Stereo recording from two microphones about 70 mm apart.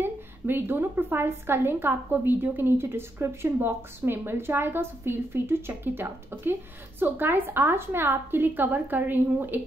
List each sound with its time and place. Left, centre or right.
0.0 s a woman's voice: right